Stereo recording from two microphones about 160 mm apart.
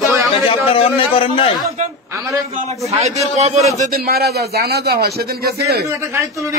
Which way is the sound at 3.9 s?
75° right (ahead or behind).